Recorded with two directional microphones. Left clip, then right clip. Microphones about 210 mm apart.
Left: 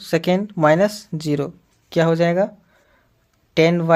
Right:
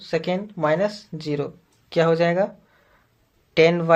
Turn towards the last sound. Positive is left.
turn(degrees=25)  # may be behind; listen again after turning